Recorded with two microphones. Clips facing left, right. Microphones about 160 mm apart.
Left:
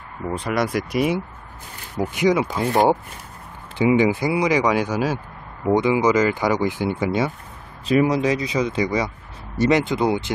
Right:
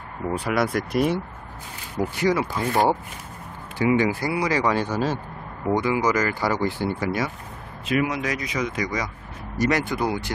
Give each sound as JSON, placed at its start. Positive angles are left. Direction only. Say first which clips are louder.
{"t": 0.4, "sound": "speech", "louder": "left 1 dB", "side_deg": 0}
{"t": 2.1, "sound": "speech", "louder": "left 4 dB", "side_deg": 20}
{"t": 7.8, "sound": "speech", "louder": "left 6 dB", "side_deg": 35}